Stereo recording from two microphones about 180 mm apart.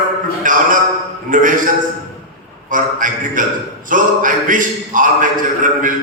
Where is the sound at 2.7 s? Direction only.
45° right (ahead or behind).